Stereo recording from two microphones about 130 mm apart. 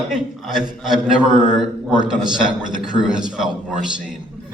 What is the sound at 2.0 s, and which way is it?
Speech, 5° right (ahead or behind).